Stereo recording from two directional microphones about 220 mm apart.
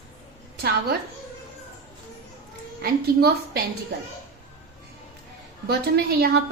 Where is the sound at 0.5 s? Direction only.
45° right (ahead or behind).